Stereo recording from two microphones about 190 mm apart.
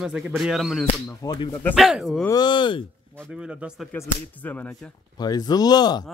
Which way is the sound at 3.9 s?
10° left (ahead or behind).